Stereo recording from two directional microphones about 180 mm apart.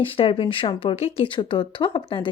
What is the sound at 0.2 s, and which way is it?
Speech, 30° left (ahead or behind).